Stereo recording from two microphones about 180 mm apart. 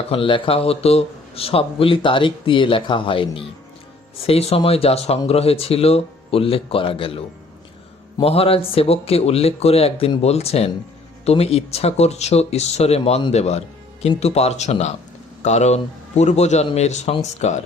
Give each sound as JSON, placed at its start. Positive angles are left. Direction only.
{"t": 0.1, "sound": "a man's voice", "side_deg": 30}
{"t": 8.2, "sound": "speech", "side_deg": 35}